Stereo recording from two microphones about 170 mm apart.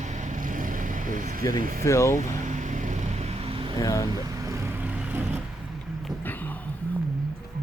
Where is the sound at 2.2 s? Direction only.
45° right (ahead or behind).